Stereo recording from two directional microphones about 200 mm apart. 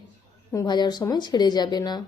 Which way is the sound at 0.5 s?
20° left (ahead or behind).